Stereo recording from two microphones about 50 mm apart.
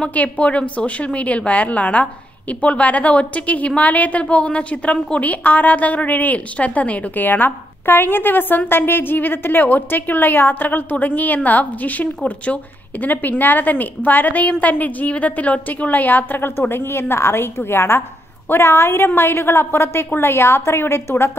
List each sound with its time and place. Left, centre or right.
0.1 s a woman's voice: left